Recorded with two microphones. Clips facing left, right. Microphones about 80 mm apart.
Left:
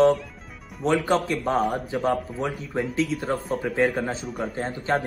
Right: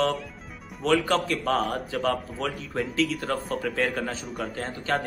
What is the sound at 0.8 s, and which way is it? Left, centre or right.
Speech, left.